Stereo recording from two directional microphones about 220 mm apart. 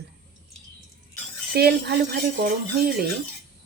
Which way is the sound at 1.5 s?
45° right (ahead or behind).